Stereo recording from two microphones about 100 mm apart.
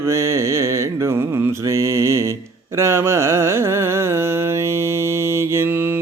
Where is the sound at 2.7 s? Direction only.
25° right (ahead or behind).